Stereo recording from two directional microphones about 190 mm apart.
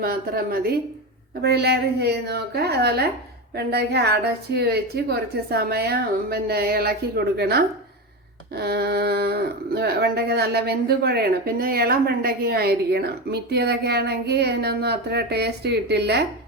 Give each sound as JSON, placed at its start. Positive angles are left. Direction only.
{"t": 0.0, "sound": "a woman's voice", "side_deg": -50}